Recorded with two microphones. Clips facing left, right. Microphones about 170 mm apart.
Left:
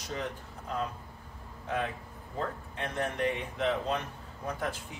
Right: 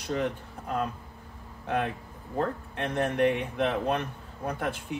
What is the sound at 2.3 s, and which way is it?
A man's voice, 60° right (ahead or behind).